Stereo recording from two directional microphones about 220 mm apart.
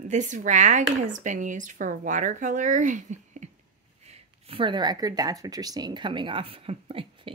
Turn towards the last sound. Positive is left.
turn(degrees=-25)  # may be behind; listen again after turning